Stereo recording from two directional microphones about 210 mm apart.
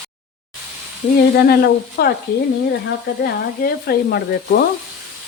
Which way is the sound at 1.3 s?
50° left (ahead or behind).